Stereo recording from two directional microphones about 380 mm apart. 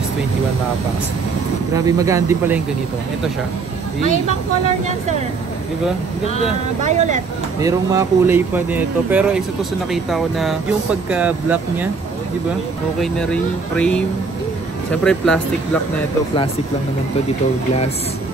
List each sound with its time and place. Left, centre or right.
1.9 s speech: centre
6.8 s speech: centre
7.6 s speech: centre
13.0 s speech: centre